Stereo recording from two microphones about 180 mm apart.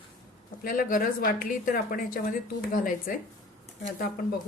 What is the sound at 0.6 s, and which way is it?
A woman's voice, 50° left (ahead or behind).